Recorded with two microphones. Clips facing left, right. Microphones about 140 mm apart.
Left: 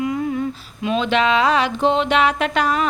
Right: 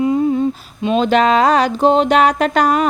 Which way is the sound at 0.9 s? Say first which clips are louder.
Right 5 dB; 40° right (ahead or behind).